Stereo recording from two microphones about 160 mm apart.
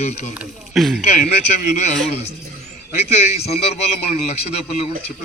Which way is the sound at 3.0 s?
40° left (ahead or behind).